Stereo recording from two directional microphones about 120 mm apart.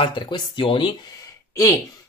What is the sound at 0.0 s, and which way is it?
Speech, 45° left (ahead or behind).